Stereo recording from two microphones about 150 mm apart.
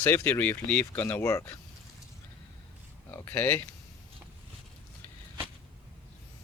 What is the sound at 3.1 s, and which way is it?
Speech, 15° left (ahead or behind).